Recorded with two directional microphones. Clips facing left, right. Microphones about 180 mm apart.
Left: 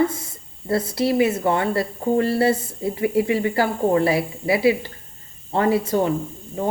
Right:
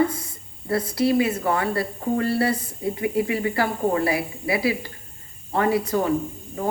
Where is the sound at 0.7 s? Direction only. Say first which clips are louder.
Even; 25° left (ahead or behind).